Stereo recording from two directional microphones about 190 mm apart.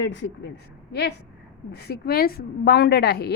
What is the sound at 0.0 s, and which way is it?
A woman's voice, 70° left (ahead or behind).